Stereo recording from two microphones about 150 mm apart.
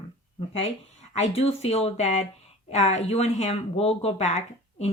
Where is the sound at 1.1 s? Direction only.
45° left (ahead or behind).